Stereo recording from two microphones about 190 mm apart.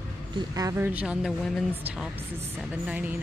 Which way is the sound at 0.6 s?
15° right (ahead or behind).